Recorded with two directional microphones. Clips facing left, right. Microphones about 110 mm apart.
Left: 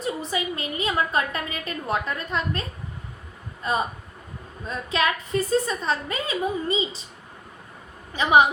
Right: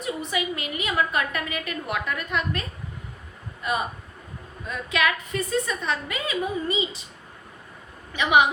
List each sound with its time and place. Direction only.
0.0 s a woman's voice: 30° left (ahead or behind)
8.1 s a woman's voice: 35° left (ahead or behind)